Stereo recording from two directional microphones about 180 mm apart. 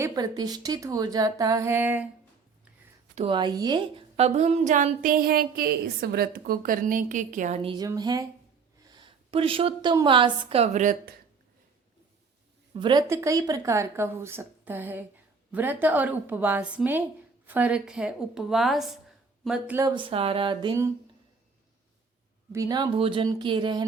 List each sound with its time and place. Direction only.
0.0 s speech: 20° right (ahead or behind)
3.2 s a woman's voice: 25° right (ahead or behind)
7.6 s a woman's voice: 30° right (ahead or behind); by 11.1 s 45° right (ahead or behind)
12.7 s a woman's voice: 25° right (ahead or behind); by 19.8 s 5° right (ahead or behind)
19.8 s speech: 25° right (ahead or behind)
22.5 s speech: 20° right (ahead or behind)